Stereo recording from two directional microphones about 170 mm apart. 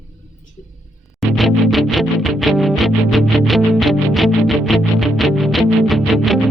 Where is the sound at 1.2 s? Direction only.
Centre (ahead or behind).